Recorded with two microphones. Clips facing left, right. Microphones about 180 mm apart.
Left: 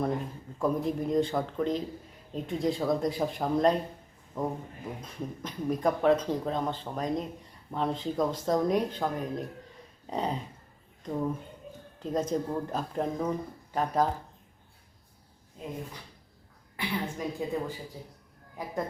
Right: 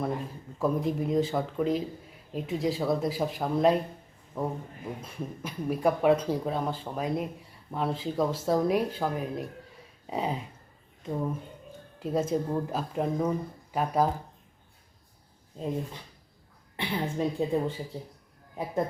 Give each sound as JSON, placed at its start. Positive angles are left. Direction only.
{"t": 0.6, "sound": "speech", "side_deg": 0}
{"t": 16.7, "sound": "a woman's voice", "side_deg": -25}